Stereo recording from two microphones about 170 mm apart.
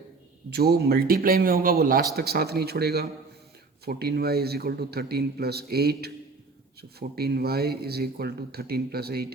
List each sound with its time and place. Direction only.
0.5 s a man's voice: 65° right (ahead or behind)
7.2 s speech: 65° right (ahead or behind)